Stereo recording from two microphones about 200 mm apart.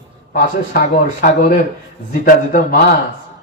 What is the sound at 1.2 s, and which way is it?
A man's voice, 45° left (ahead or behind).